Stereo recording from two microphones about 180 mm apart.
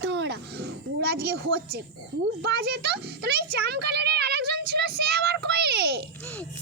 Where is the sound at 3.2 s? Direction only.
60° right (ahead or behind).